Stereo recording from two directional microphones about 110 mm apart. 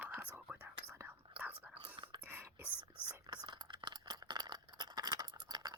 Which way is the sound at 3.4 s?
45° right (ahead or behind).